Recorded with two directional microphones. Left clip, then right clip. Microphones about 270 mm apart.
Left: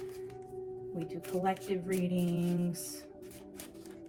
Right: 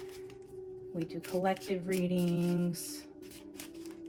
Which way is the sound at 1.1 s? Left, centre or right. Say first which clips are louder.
Right 1 dB; right.